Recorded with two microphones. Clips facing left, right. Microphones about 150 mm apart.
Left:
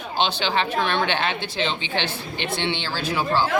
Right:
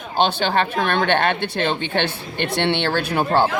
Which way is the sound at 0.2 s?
50° right (ahead or behind).